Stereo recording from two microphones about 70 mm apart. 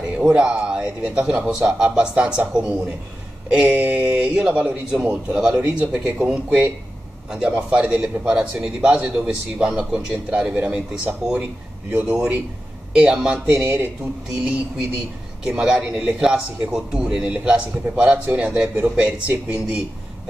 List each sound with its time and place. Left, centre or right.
0.2 s a man's voice: centre
13.5 s speech: right
15.4 s a man's voice: centre